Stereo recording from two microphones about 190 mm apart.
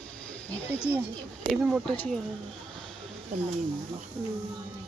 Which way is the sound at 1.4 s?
5° right (ahead or behind).